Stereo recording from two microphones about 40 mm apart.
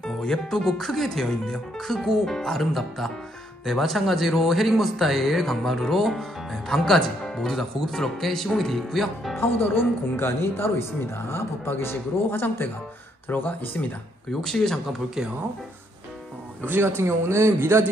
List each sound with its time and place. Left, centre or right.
0.0 s speech: centre
2.6 s speech: centre
9.4 s a man's voice: left
13.3 s speech: left
14.4 s speech: centre
16.8 s a man's voice: right